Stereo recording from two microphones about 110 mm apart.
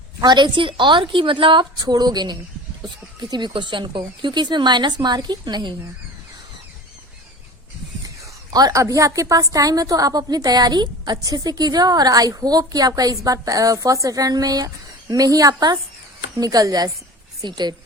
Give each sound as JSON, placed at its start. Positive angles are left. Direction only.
{"t": 0.2, "sound": "speech", "side_deg": -40}
{"t": 8.0, "sound": "a woman's voice", "side_deg": -35}